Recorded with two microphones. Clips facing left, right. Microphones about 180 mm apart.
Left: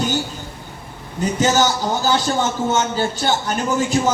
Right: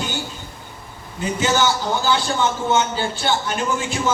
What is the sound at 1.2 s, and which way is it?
A man's voice, 40° left (ahead or behind).